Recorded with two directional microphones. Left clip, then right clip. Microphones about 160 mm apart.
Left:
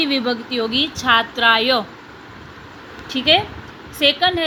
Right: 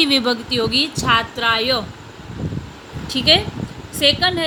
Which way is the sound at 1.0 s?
15° left (ahead or behind).